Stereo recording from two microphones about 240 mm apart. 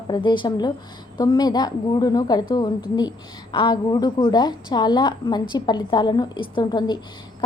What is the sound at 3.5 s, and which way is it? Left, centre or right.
A woman's voice, centre.